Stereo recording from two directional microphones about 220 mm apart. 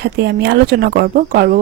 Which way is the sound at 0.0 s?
50° right (ahead or behind).